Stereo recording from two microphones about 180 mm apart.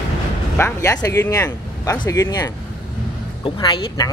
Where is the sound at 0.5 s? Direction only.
15° left (ahead or behind).